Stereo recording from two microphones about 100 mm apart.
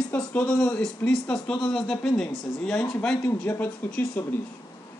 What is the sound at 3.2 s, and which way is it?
Speech, 20° left (ahead or behind).